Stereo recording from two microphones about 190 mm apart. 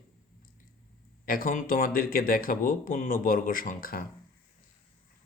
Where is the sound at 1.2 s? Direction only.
50° left (ahead or behind).